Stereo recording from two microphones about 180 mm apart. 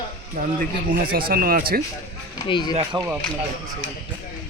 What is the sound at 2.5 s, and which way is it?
Speech, 25° left (ahead or behind).